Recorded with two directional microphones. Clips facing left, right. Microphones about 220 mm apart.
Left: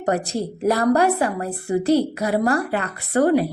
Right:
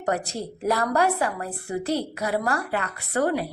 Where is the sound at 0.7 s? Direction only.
35° left (ahead or behind).